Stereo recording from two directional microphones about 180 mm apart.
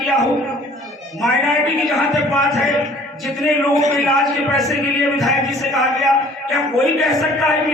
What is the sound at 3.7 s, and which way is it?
Speech, 40° right (ahead or behind).